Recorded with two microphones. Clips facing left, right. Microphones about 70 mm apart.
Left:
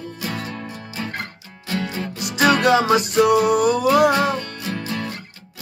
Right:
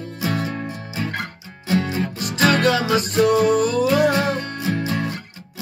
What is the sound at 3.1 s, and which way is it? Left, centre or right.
Music, centre.